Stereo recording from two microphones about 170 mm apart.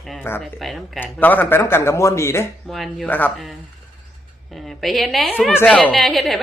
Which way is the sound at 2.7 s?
Centre (ahead or behind).